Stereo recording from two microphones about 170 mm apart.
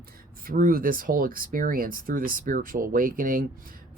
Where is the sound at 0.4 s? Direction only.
55° right (ahead or behind).